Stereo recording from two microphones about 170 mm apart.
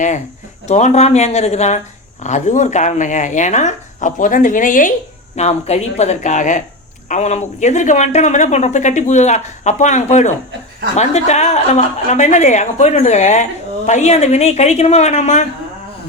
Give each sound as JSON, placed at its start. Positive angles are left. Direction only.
{"t": 0.7, "sound": "a woman's voice", "side_deg": 40}
{"t": 5.4, "sound": "a woman's voice", "side_deg": 40}